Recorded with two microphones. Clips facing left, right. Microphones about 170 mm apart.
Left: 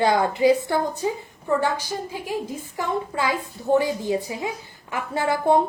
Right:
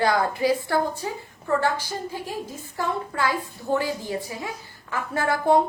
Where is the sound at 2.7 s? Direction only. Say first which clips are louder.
Left 1 dB; 20° left (ahead or behind).